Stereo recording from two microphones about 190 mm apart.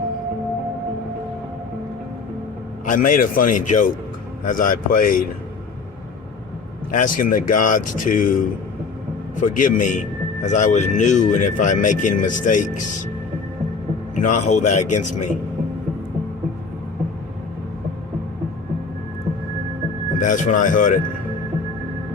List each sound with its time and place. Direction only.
2.8 s speech: 45° left (ahead or behind)
6.9 s speech: 45° left (ahead or behind)
9.3 s a man's voice: 45° left (ahead or behind)
14.2 s a man's voice: 40° left (ahead or behind)
20.1 s speech: 45° left (ahead or behind)